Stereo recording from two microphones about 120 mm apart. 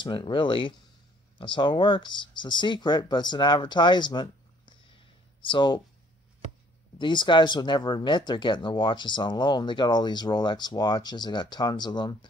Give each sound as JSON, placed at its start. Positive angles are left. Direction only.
{"t": 0.0, "sound": "speech", "side_deg": 40}
{"t": 7.0, "sound": "speech", "side_deg": 40}